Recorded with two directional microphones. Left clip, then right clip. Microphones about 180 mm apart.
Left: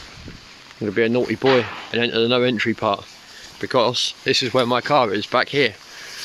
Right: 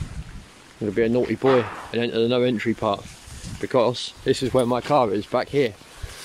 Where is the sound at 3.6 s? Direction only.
15° right (ahead or behind).